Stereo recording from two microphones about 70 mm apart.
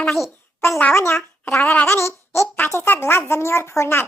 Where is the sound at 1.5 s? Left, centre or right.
Left.